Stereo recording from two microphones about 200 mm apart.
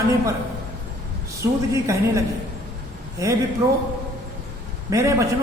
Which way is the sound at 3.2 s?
15° right (ahead or behind).